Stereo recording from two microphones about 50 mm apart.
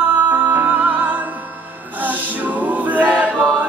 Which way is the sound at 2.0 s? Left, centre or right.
Right.